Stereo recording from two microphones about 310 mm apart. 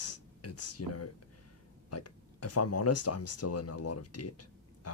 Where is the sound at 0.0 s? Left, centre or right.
Left.